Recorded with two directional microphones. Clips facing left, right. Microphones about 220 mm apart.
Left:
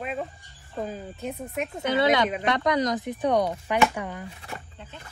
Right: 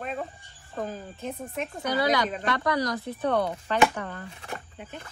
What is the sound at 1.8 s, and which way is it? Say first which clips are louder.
Speech: left 3 dB; 25° left (ahead or behind).